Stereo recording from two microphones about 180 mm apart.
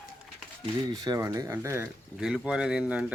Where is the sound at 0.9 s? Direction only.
20° right (ahead or behind).